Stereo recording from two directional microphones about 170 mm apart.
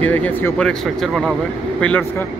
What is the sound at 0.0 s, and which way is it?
Speech, 10° left (ahead or behind).